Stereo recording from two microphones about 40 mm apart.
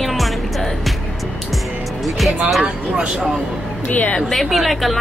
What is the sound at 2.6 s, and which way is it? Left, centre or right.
Speech, right.